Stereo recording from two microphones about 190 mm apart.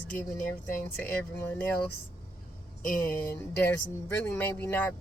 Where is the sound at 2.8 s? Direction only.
45° left (ahead or behind).